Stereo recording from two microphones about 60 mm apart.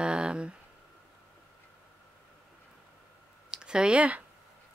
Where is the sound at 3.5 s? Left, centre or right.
Centre.